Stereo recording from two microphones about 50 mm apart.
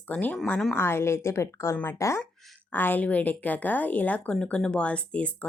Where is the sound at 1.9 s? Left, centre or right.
Left.